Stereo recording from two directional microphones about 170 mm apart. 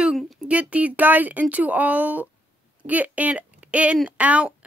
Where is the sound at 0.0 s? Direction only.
Centre (ahead or behind).